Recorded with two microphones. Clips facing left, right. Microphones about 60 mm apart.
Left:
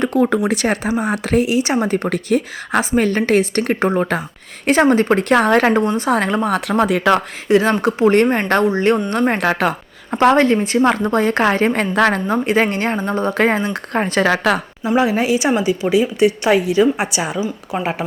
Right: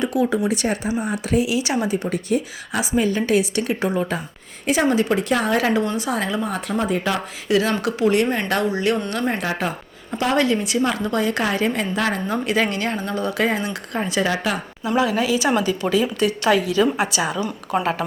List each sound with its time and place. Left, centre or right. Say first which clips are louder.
0.0 s a woman's voice: left 4 dB; left
1.5 s speech: left 4 dB; left
1.9 s speech: left 4 dB; left
2.9 s a woman's voice: left 3 dB; left
7.4 s speech: left 4 dB; left
9.4 s speech: left 7 dB; left
10.1 s speech: left 7 dB; left
11.9 s a woman's voice: left 7 dB; left
12.3 s speech: left 5 dB; left
14.3 s speech: left 7 dB; left
14.8 s a woman's voice: left 4 dB; left
15.5 s a woman's voice: left 4 dB; centre
17.4 s a woman's voice: even; centre